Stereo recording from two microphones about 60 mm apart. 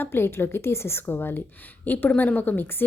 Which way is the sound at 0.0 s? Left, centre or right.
Left.